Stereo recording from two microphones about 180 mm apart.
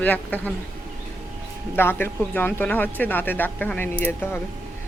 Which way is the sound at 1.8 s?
10° left (ahead or behind).